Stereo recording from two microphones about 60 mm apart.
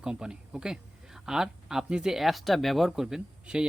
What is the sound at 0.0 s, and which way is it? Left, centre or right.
Speech, centre.